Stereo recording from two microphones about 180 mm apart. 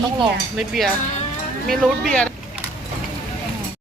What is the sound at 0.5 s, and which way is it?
Speech, centre (ahead or behind).